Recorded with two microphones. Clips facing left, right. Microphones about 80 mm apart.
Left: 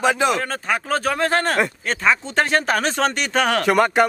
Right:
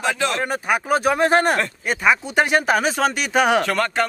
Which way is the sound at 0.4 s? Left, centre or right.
Centre.